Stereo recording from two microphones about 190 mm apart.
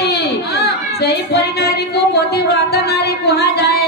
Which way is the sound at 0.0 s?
55° left (ahead or behind).